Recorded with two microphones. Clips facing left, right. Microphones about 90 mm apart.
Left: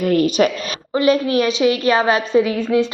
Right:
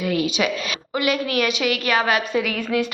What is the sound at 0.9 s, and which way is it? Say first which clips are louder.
A woman's voice: left 6 dB; 30° left (ahead or behind).